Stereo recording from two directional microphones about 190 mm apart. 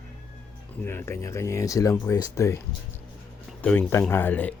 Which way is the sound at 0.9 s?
15° left (ahead or behind).